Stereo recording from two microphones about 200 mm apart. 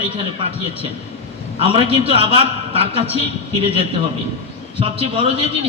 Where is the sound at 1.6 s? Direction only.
30° right (ahead or behind).